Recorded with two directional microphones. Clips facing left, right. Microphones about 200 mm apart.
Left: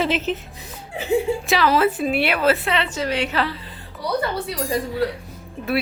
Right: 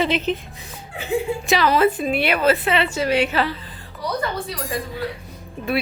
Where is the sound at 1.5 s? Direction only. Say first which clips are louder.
Right 3 dB; centre (ahead or behind).